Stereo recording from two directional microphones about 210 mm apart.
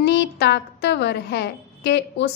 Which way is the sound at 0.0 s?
55° left (ahead or behind).